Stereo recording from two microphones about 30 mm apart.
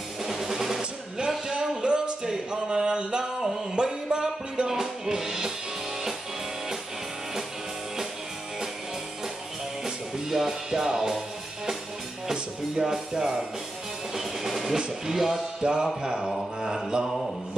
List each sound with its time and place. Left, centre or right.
0.2 s music: centre
1.8 s music: right
2.2 s a sound: right
3.8 s music: right
9.8 s music: centre
12.7 s speech: centre
14.1 s music: centre
14.8 s speech: centre
15.6 s mantra: right